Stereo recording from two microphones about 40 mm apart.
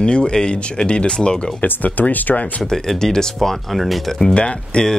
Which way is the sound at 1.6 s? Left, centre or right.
Left.